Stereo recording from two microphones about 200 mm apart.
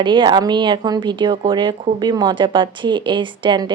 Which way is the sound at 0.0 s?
25° right (ahead or behind).